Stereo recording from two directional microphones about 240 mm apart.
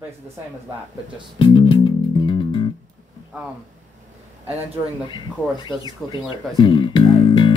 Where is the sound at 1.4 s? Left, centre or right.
Left.